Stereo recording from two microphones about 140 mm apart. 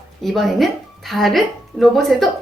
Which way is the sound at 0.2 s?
Centre (ahead or behind).